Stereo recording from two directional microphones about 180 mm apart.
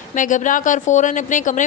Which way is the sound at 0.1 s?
45° left (ahead or behind).